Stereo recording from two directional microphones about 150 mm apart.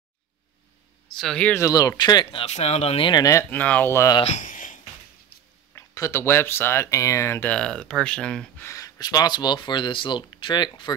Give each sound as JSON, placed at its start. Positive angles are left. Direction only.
{"t": 1.1, "sound": "speech", "side_deg": 5}
{"t": 1.6, "sound": "speech", "side_deg": 25}
{"t": 2.4, "sound": "speech", "side_deg": 45}
{"t": 3.1, "sound": "speech", "side_deg": 25}
{"t": 3.4, "sound": "speech", "side_deg": 10}
{"t": 4.2, "sound": "a sound", "side_deg": 50}
{"t": 5.8, "sound": "speech", "side_deg": 20}
{"t": 8.6, "sound": "speech", "side_deg": 20}